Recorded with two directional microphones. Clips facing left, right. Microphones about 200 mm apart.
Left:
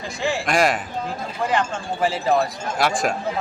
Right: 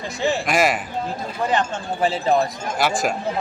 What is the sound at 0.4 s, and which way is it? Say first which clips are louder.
Speech: left 2 dB; 5° right (ahead or behind).